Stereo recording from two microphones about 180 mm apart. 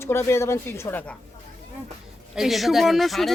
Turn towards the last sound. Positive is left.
turn(degrees=0)  # may be behind; listen again after turning